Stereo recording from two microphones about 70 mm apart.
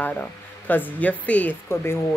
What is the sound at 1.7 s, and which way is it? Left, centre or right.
Speech, left.